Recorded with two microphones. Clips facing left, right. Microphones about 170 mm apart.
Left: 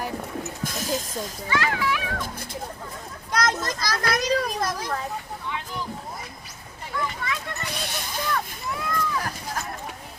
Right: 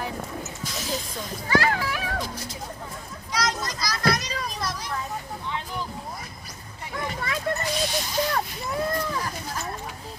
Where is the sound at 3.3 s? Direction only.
55° left (ahead or behind).